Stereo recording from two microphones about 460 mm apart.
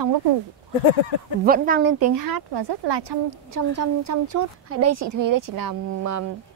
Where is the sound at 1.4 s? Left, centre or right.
Centre.